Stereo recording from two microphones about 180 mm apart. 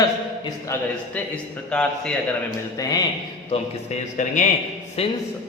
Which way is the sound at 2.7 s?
20° left (ahead or behind).